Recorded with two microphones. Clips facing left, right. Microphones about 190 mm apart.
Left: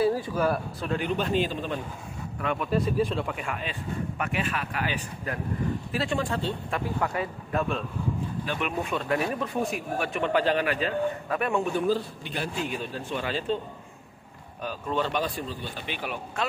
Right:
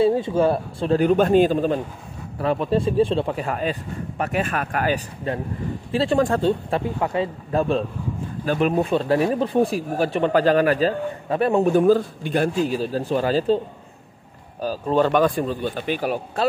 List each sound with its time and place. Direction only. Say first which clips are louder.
0.0 s speech: right 6 dB; 25° right (ahead or behind)
1.0 s speech: right 11 dB; 50° right (ahead or behind)
2.3 s speech: right 6 dB; 35° right (ahead or behind)
5.3 s speech: right 4 dB; 30° right (ahead or behind)
6.1 s speech: right 11 dB; 45° right (ahead or behind)
6.7 s speech: right 6 dB; 25° right (ahead or behind); by 12.7 s 50° right (ahead or behind)
12.7 s speech: right 10 dB; 35° right (ahead or behind)
14.6 s speech: right 9 dB; 35° right (ahead or behind)
15.0 s speech: right 11 dB; 50° right (ahead or behind)